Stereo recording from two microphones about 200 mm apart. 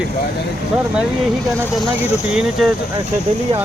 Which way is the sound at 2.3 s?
Centre (ahead or behind).